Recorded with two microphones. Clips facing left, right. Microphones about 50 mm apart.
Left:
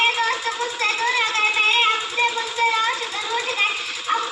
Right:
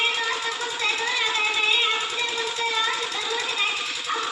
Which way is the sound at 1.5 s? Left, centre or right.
Left.